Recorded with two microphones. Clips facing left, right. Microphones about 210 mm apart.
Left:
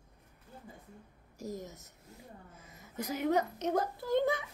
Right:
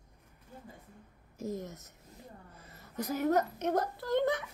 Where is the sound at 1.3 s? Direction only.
15° left (ahead or behind).